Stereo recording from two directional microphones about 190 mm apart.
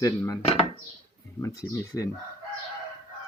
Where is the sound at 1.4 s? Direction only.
15° left (ahead or behind).